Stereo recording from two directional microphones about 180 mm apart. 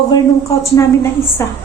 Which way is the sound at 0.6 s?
15° left (ahead or behind).